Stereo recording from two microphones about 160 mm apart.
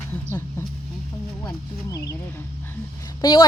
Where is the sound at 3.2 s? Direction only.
25° left (ahead or behind).